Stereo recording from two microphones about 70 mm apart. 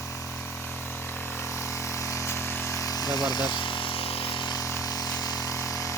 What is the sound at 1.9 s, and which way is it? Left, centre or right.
Vehicle, left.